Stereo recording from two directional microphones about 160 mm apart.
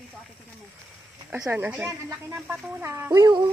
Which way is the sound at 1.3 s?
15° right (ahead or behind).